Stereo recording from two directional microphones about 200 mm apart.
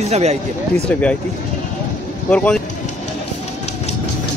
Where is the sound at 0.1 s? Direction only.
35° right (ahead or behind).